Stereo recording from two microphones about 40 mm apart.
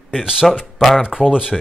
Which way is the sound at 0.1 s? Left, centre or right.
Centre.